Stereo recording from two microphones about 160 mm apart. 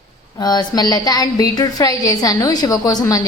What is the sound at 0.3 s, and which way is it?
A woman's voice, 25° left (ahead or behind).